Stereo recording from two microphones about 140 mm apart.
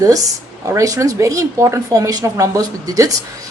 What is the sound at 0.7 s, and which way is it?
A woman's voice, 20° right (ahead or behind).